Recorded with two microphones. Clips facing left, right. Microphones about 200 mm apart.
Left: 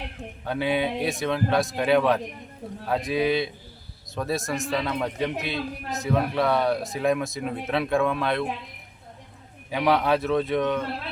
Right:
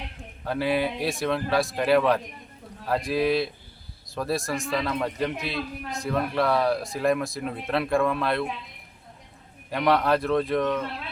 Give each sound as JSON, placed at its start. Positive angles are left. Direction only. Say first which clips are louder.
{"t": 0.4, "sound": "speech", "louder": "even", "side_deg": 0}
{"t": 9.6, "sound": "speech", "louder": "even", "side_deg": 0}